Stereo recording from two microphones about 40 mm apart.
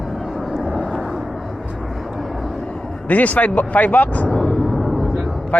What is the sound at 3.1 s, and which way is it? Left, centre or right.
Speech, left.